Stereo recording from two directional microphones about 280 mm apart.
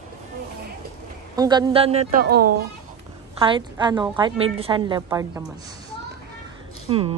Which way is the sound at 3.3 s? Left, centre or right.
Centre.